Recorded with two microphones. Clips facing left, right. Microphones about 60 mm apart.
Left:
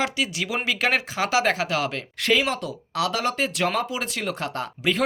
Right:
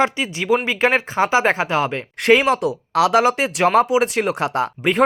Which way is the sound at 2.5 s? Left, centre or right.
Right.